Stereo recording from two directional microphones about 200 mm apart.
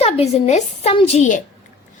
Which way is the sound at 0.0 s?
30° left (ahead or behind).